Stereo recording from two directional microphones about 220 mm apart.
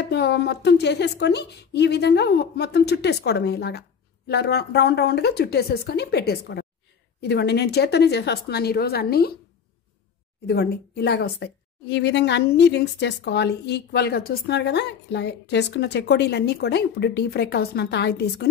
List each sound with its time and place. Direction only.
0.1 s a woman's voice: 50° left (ahead or behind)
10.4 s a woman's voice: 45° left (ahead or behind)